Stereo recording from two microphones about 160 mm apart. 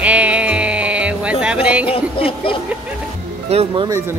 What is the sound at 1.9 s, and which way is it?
Speech, 35° left (ahead or behind).